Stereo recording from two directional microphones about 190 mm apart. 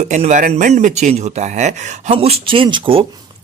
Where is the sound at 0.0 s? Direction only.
35° right (ahead or behind).